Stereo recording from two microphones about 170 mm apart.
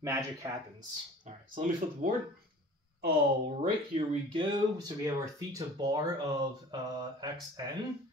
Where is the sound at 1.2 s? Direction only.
50° right (ahead or behind).